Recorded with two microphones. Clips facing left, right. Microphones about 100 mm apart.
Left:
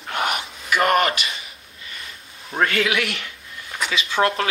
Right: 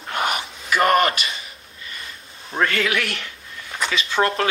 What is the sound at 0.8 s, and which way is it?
Speech, 35° right (ahead or behind).